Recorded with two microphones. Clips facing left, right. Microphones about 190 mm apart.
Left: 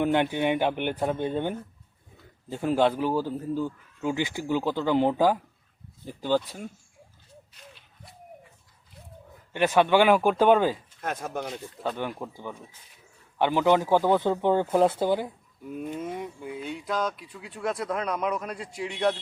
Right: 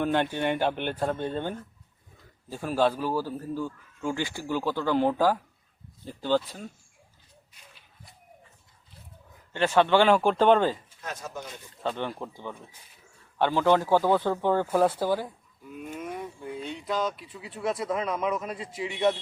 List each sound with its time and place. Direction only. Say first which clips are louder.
0.0 s speech: left 2 dB; 15° left (ahead or behind)
9.5 s speech: left 1 dB; 15° left (ahead or behind)
11.0 s speech: left 6 dB; 55° left (ahead or behind)
11.8 s speech: right 1 dB; 10° left (ahead or behind)
16.6 s speech: even; centre (ahead or behind)